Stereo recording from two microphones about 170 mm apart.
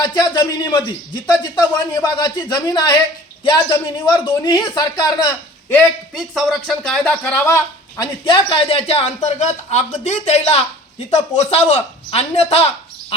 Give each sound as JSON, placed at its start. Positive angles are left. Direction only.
{"t": 0.0, "sound": "speech", "side_deg": 25}
{"t": 6.1, "sound": "a woman's voice", "side_deg": 0}